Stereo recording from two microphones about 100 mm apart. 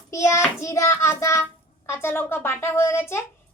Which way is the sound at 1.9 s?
20° left (ahead or behind).